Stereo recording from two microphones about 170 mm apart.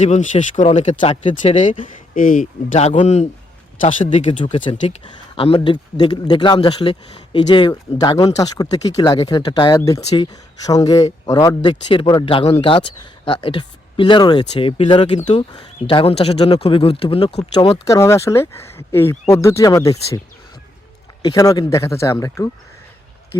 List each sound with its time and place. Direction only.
0.0 s speech: 45° left (ahead or behind)
1.6 s speech: 30° left (ahead or behind)
2.1 s speech: 50° left (ahead or behind)
4.4 s speech: 30° left (ahead or behind)